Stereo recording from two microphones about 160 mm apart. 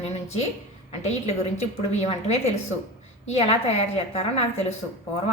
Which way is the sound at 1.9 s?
45° left (ahead or behind).